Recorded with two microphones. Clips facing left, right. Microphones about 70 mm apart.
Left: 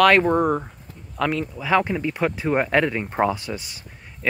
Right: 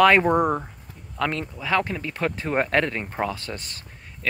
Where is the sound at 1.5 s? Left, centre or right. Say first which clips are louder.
Left 4 dB; centre.